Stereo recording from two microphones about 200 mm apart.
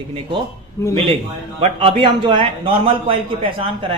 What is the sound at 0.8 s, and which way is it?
Speech, 15° left (ahead or behind).